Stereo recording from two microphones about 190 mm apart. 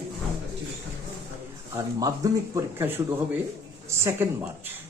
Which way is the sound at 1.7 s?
15° right (ahead or behind).